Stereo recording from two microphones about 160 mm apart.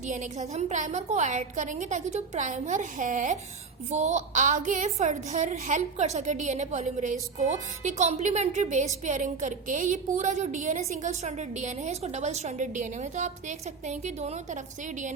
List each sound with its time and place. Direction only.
0.1 s a woman's voice: 45° right (ahead or behind)